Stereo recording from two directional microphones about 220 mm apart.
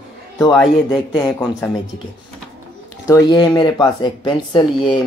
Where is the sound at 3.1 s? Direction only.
20° left (ahead or behind).